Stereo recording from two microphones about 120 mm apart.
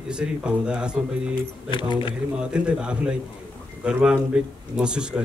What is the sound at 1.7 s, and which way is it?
Speech, 45° left (ahead or behind).